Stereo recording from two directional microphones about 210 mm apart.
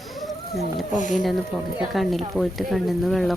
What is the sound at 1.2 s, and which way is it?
Speech, centre (ahead or behind).